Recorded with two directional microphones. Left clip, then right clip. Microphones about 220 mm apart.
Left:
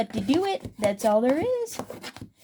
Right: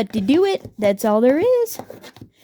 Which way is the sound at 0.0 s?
55° right (ahead or behind).